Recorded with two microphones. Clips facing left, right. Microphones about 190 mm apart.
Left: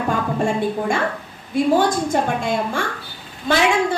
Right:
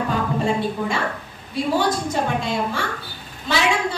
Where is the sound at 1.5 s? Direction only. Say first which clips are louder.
Left 4 dB; 50° left (ahead or behind).